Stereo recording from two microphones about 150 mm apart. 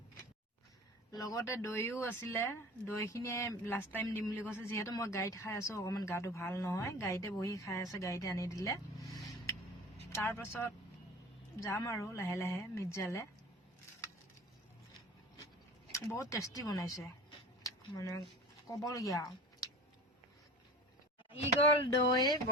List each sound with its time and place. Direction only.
1.1 s speech: 25° left (ahead or behind)
10.1 s speech: 15° left (ahead or behind)
15.9 s speech: 20° left (ahead or behind)
17.6 s a sound: 20° left (ahead or behind)
18.7 s speech: 20° left (ahead or behind)
21.9 s speech: 25° left (ahead or behind)